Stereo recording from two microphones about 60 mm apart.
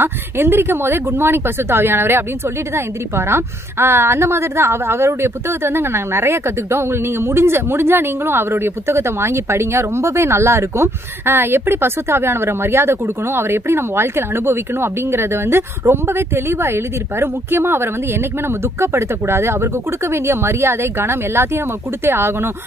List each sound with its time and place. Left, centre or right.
0.0 s a woman's voice: right